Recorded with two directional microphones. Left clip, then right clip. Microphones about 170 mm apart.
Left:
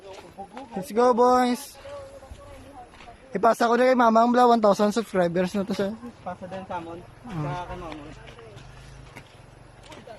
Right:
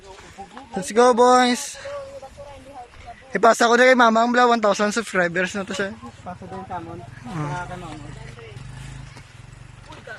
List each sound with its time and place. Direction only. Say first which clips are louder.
0.7 s speech: right 5 dB; 5° left (ahead or behind)
3.3 s speech: right 5 dB; 5° left (ahead or behind); by 5.9 s 25° left (ahead or behind)